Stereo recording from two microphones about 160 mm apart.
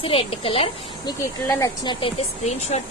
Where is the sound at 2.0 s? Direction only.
40° left (ahead or behind).